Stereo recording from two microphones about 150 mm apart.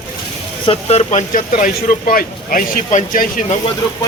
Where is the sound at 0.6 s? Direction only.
45° left (ahead or behind).